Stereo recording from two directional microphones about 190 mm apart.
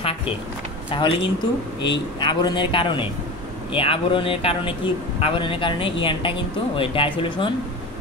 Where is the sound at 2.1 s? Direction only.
25° left (ahead or behind).